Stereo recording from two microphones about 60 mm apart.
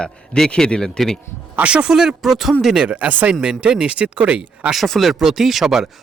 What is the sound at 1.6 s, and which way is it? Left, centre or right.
Speech, centre.